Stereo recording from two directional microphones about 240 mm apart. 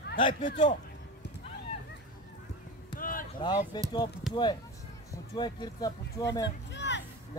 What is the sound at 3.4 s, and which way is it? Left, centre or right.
Speech, centre.